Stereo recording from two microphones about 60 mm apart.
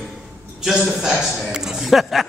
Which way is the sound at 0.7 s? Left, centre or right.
Centre.